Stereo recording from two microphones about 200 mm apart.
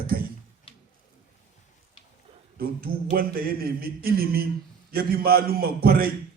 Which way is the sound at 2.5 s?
50° right (ahead or behind).